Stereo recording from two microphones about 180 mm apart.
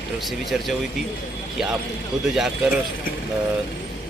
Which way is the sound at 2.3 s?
5° right (ahead or behind).